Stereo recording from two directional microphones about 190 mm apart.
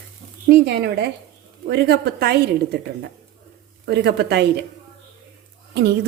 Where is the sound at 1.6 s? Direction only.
60° right (ahead or behind).